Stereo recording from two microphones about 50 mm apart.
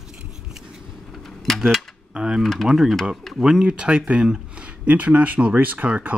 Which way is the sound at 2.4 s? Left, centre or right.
Centre.